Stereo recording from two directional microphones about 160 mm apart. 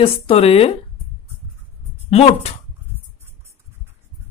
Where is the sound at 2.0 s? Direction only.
40° left (ahead or behind).